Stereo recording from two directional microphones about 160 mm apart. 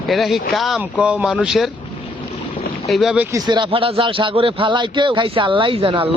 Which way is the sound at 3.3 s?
25° right (ahead or behind).